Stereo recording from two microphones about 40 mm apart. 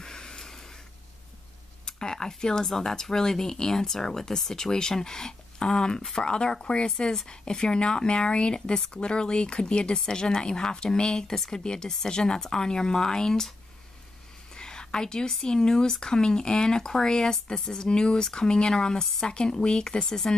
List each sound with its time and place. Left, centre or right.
0.0 s a sound: centre
1.9 s speech: centre
14.5 s speech: centre